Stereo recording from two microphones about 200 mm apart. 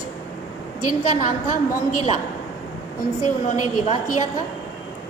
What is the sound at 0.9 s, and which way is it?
Speech, 40° left (ahead or behind).